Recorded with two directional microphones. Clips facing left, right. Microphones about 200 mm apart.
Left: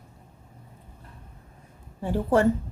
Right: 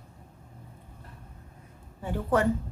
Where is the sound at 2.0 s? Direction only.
30° left (ahead or behind).